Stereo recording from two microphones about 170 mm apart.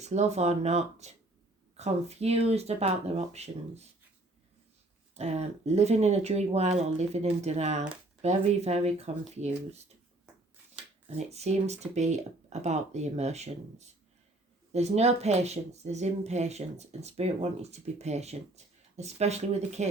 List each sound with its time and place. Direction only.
0.0 s speech: 40° right (ahead or behind)
5.1 s speech: 40° right (ahead or behind)
11.3 s speech: 40° right (ahead or behind)